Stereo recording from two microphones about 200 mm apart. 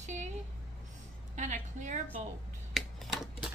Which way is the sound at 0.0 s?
35° right (ahead or behind).